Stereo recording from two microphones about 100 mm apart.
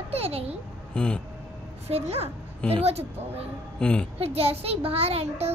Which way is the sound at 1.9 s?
90° right.